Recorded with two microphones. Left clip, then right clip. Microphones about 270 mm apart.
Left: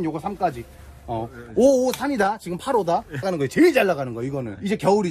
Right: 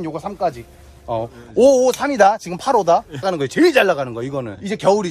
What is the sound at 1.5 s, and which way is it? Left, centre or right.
Speech, centre.